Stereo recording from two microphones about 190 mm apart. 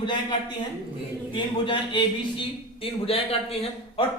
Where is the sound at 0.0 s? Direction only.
25° left (ahead or behind).